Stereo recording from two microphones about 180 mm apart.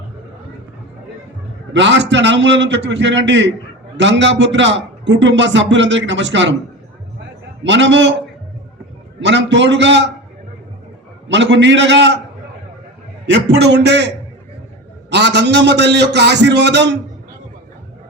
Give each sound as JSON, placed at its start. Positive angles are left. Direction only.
{"t": 1.7, "sound": "a man's voice", "side_deg": -80}
{"t": 7.6, "sound": "a man's voice", "side_deg": -90}
{"t": 9.2, "sound": "a man's voice", "side_deg": -80}
{"t": 11.3, "sound": "a man's voice", "side_deg": -80}
{"t": 13.3, "sound": "a man's voice", "side_deg": -70}
{"t": 15.1, "sound": "a man's voice", "side_deg": -70}